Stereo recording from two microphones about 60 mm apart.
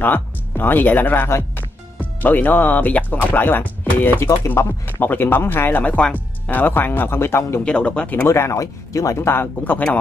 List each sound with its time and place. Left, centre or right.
0.0 s speech: left
7.6 s speech: centre
8.3 s speech: left